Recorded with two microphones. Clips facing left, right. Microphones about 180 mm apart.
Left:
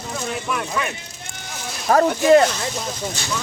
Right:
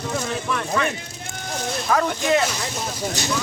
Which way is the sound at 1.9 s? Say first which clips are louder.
Left 7 dB; 40° left (ahead or behind).